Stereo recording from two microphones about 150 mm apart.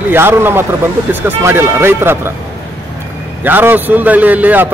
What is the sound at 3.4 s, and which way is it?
Speech, 15° right (ahead or behind).